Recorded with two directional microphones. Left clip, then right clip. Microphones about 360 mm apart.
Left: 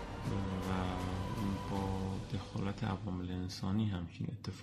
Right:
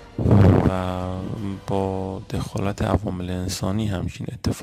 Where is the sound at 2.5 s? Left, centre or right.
Right.